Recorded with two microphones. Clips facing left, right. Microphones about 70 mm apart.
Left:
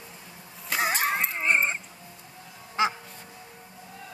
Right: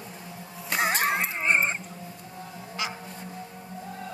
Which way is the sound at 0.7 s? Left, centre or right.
Centre.